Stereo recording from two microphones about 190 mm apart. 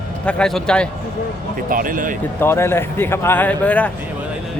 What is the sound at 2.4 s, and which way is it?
Speech, 15° left (ahead or behind).